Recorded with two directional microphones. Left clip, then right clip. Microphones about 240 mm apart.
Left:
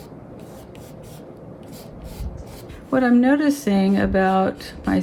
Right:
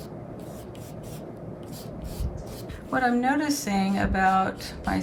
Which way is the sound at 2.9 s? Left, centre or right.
Left.